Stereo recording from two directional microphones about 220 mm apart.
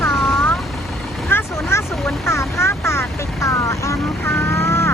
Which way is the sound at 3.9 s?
5° left (ahead or behind).